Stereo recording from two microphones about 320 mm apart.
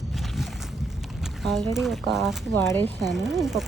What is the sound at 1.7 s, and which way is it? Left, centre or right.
Speech, centre.